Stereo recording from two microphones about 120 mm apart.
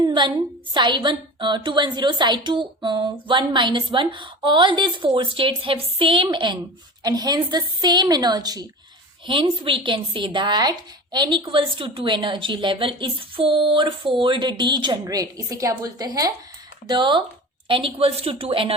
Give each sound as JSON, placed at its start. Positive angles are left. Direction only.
{"t": 0.0, "sound": "a woman's voice", "side_deg": -40}
{"t": 9.2, "sound": "a woman's voice", "side_deg": -45}